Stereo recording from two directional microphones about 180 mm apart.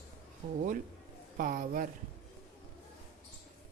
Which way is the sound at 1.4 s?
50° right (ahead or behind).